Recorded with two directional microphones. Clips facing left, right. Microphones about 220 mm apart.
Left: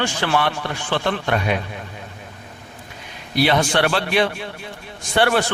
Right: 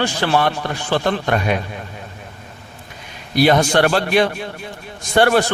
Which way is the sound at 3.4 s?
45° right (ahead or behind).